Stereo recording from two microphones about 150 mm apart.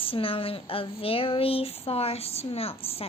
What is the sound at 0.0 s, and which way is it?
A woman's voice, 35° left (ahead or behind).